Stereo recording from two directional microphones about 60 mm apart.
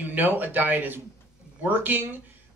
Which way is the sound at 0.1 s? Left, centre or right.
Right.